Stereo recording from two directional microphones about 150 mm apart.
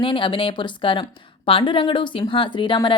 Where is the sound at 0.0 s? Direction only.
35° left (ahead or behind).